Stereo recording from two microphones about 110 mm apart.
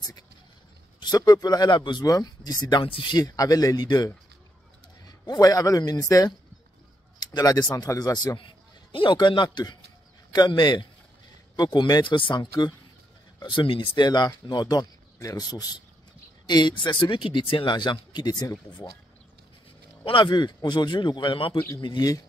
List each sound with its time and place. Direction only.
0.9 s speech: 40° left (ahead or behind)
2.8 s speech: 50° left (ahead or behind)
3.3 s a man's voice: 35° left (ahead or behind)
20.1 s speech: 50° left (ahead or behind)
21.8 s speech: 40° left (ahead or behind)